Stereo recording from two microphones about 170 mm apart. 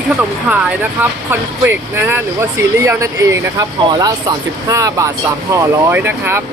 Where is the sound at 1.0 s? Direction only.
15° right (ahead or behind).